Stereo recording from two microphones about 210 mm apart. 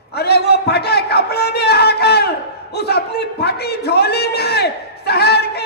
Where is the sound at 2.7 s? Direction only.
50° left (ahead or behind).